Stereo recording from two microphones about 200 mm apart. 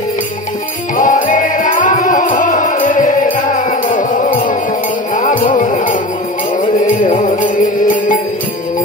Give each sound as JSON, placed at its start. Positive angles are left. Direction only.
{"t": 0.9, "sound": "music", "side_deg": 40}